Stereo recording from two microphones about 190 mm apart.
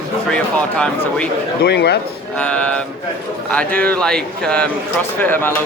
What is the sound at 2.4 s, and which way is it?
Speech, 5° left (ahead or behind).